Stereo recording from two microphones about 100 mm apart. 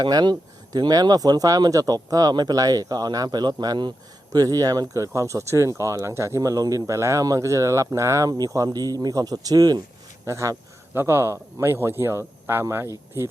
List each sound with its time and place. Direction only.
0.0 s speech: 45° right (ahead or behind)
10.2 s speech: 30° right (ahead or behind)